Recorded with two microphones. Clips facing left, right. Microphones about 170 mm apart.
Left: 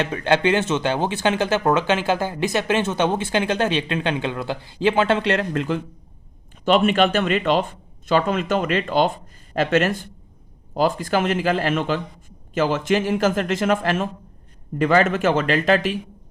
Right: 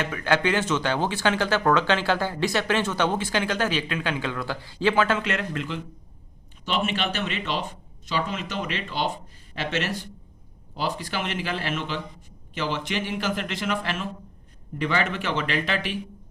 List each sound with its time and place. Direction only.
0.0 s speech: 25° left (ahead or behind); by 5.8 s 40° left (ahead or behind)
6.7 s speech: 55° left (ahead or behind)